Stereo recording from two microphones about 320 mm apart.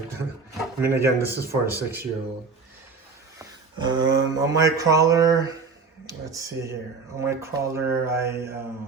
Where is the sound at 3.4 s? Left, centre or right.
Centre.